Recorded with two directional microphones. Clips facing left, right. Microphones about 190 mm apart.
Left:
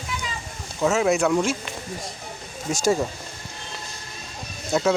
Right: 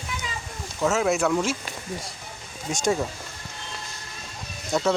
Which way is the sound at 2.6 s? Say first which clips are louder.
Left 3 dB; centre (ahead or behind).